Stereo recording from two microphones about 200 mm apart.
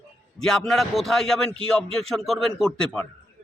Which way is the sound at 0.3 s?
Centre (ahead or behind).